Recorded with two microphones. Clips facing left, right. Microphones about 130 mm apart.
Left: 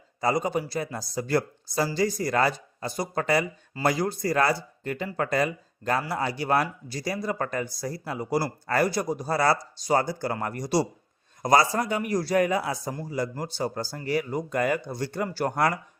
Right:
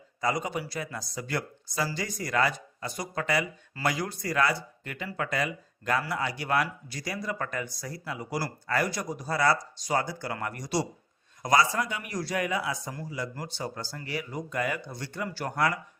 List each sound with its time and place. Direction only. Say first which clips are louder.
0.2 s speech: left 4 dB; 35° left (ahead or behind)